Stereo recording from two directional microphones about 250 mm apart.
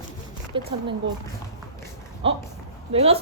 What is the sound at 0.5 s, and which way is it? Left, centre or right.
Speech, right.